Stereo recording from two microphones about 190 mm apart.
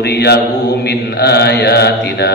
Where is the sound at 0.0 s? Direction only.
60° left (ahead or behind).